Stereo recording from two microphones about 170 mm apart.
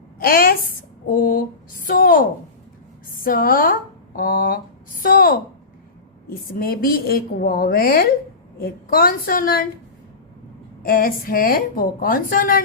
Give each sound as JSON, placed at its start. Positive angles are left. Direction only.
{"t": 0.2, "sound": "a woman's voice", "side_deg": 60}
{"t": 3.2, "sound": "a woman's voice", "side_deg": 55}
{"t": 6.5, "sound": "a woman's voice", "side_deg": 60}
{"t": 10.8, "sound": "a woman's voice", "side_deg": 60}